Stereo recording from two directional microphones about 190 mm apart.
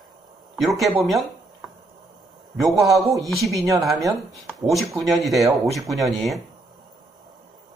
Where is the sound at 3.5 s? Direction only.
15° right (ahead or behind).